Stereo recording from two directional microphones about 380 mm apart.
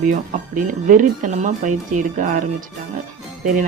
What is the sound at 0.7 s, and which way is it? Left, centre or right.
Speech, right.